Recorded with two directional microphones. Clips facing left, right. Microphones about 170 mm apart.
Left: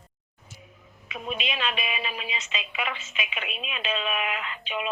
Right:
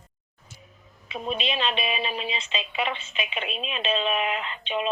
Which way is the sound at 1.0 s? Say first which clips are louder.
Right 4 dB; 30° right (ahead or behind).